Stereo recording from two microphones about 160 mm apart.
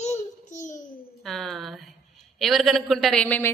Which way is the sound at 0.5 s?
50° left (ahead or behind).